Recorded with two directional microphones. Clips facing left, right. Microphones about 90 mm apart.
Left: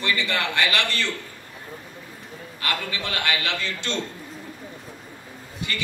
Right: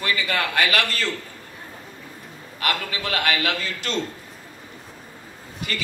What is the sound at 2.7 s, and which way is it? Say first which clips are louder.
Speech: right 2 dB; 25° left (ahead or behind).